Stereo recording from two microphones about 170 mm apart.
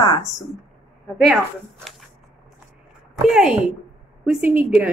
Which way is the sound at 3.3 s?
5° right (ahead or behind).